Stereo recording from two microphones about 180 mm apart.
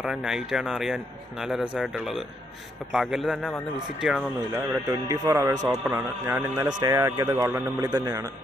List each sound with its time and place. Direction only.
0.0 s speech: 5° right (ahead or behind)
4.6 s a man's voice: 20° right (ahead or behind)